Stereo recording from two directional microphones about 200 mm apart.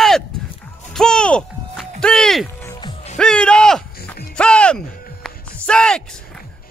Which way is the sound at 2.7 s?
25° left (ahead or behind).